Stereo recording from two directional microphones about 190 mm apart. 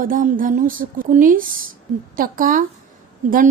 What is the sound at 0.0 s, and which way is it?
Speech, 45° right (ahead or behind).